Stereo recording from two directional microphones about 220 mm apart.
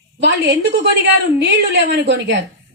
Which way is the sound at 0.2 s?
50° right (ahead or behind).